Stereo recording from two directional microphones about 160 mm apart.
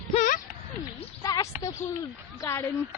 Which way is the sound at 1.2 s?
20° left (ahead or behind).